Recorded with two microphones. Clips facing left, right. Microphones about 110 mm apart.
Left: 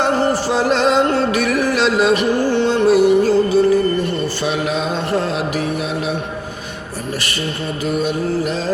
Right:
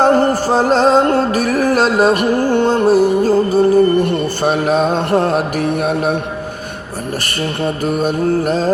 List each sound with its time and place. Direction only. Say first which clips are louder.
0.0 s music: right 4 dB; 45° right (ahead or behind)
7.6 s music: right 4 dB; 45° right (ahead or behind)